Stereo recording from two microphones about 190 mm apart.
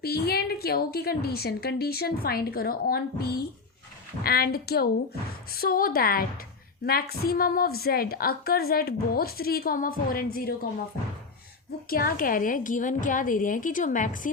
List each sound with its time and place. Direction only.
0.0 s a woman's voice: 55° left (ahead or behind)
11.9 s a woman's voice: 50° left (ahead or behind)